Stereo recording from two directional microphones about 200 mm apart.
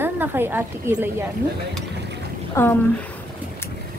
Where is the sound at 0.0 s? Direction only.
10° right (ahead or behind).